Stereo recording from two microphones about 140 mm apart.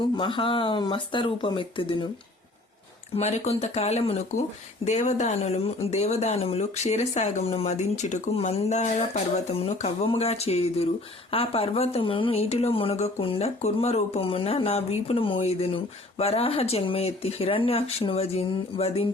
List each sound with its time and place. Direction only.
0.2 s speech: 35° left (ahead or behind)
3.2 s speech: 50° left (ahead or behind)